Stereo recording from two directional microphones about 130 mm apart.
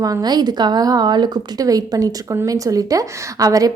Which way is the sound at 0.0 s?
30° right (ahead or behind).